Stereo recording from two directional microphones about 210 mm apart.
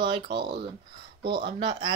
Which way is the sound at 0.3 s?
50° right (ahead or behind).